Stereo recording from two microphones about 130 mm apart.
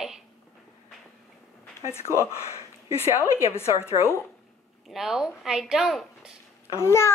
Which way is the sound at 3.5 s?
20° left (ahead or behind).